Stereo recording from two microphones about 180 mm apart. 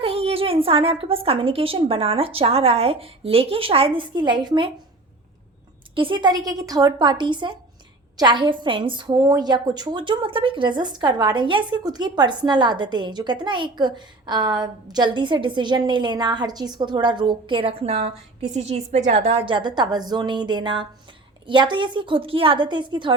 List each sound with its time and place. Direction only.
0.0 s a woman's voice: 30° right (ahead or behind)
5.9 s a woman's voice: 30° right (ahead or behind)